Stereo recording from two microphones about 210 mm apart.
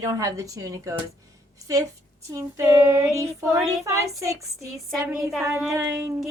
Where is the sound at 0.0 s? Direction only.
15° right (ahead or behind).